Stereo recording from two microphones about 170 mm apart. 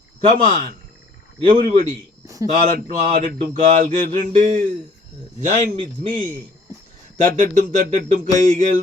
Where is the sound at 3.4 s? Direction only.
50° right (ahead or behind).